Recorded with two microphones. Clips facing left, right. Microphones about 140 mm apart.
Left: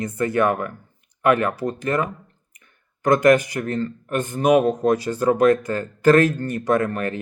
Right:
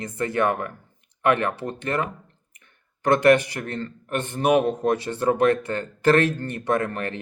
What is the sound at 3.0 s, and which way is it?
Speech, 35° right (ahead or behind).